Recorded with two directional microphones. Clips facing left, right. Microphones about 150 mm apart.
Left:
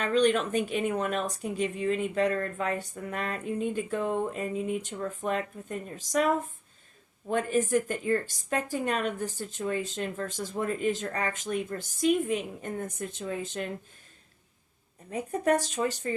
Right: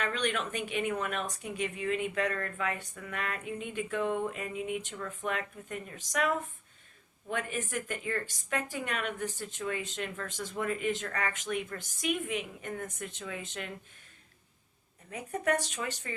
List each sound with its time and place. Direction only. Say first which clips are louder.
0.0 s a woman's voice: left 8 dB; 35° left (ahead or behind)
15.1 s a woman's voice: left 5 dB; 35° left (ahead or behind)